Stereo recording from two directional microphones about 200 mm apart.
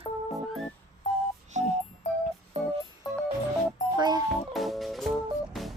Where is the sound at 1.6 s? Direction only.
35° right (ahead or behind).